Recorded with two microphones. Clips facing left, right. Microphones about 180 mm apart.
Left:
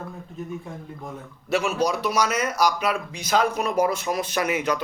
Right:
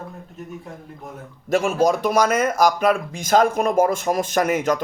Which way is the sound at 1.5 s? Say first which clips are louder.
Right 5 dB; 45° right (ahead or behind).